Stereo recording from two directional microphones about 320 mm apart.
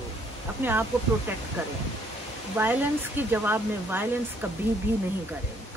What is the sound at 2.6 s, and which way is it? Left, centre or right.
Speech, centre.